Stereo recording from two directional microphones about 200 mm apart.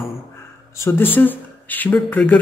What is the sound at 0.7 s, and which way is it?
Speech, 10° left (ahead or behind).